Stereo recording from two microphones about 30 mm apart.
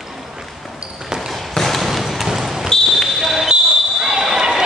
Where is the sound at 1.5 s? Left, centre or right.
Centre.